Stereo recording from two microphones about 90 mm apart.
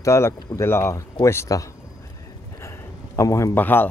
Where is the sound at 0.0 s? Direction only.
35° left (ahead or behind).